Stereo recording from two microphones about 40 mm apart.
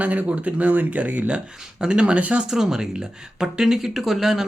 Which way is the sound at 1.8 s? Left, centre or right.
Right.